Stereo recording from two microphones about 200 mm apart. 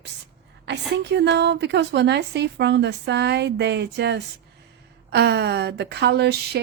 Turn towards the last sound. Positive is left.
turn(degrees=-55)  # may be behind; listen again after turning